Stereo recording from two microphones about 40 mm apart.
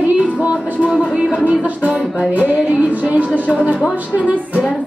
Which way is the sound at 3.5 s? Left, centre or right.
Right.